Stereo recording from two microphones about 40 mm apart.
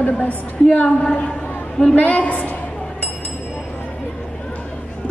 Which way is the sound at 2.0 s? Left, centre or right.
Left.